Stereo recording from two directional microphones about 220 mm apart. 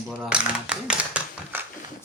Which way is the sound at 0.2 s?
5° right (ahead or behind).